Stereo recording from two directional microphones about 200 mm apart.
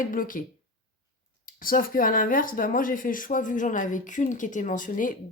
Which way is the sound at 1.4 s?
45° left (ahead or behind).